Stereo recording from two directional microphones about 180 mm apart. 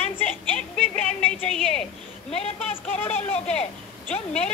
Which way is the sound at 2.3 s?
35° left (ahead or behind).